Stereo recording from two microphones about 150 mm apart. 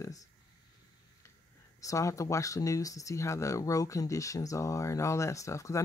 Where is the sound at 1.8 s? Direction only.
20° left (ahead or behind).